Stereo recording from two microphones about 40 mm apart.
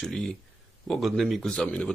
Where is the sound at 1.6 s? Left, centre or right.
Left.